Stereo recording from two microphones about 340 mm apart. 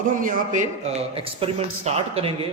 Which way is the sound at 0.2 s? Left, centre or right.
Right.